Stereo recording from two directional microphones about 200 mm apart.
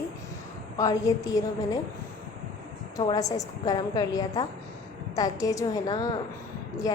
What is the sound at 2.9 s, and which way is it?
A woman's voice, 20° left (ahead or behind).